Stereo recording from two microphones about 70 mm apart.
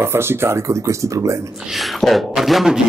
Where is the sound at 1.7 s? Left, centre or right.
Centre.